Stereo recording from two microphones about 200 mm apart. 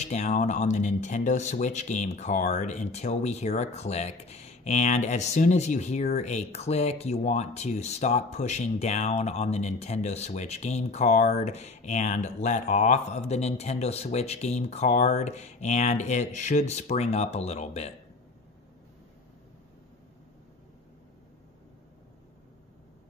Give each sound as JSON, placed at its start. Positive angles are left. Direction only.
{"t": 0.0, "sound": "speech", "side_deg": 35}